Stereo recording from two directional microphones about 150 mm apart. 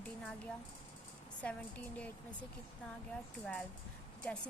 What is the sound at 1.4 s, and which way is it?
A woman's voice, 10° left (ahead or behind).